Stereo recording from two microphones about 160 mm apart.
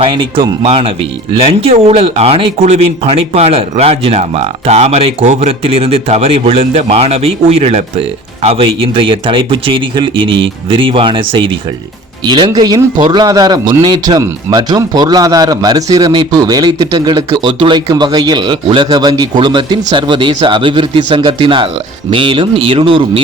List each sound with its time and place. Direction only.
0.0 s a man's voice: 35° right (ahead or behind)